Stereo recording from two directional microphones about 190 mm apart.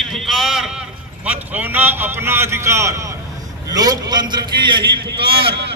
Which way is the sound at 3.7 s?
20° right (ahead or behind).